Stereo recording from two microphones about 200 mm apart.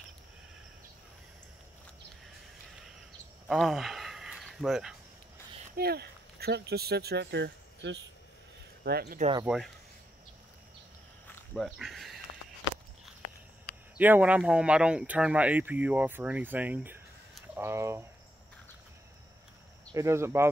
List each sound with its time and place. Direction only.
3.4 s a sound: centre (ahead or behind)
5.8 s speech: 50° right (ahead or behind)
9.5 s speech: 5° right (ahead or behind)
11.2 s a sound: centre (ahead or behind)
13.9 s speech: 10° right (ahead or behind)
19.9 s speech: 15° right (ahead or behind)